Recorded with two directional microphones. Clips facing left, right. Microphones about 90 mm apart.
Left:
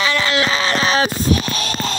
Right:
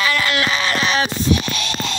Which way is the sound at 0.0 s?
25° left (ahead or behind).